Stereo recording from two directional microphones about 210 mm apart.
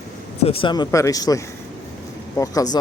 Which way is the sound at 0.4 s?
25° left (ahead or behind).